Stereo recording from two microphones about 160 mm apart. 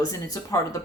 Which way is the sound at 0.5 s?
20° left (ahead or behind).